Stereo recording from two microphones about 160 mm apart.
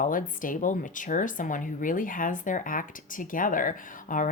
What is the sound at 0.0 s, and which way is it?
Speech, 55° left (ahead or behind).